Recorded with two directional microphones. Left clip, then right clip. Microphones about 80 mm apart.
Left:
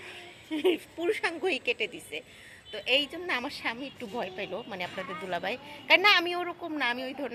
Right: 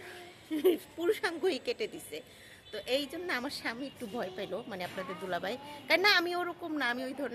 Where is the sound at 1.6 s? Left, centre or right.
Right.